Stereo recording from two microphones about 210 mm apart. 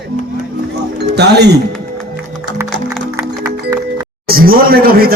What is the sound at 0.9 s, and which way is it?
Music, 55° right (ahead or behind).